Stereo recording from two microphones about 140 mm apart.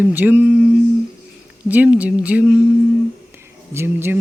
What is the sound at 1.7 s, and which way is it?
Speech, 10° right (ahead or behind).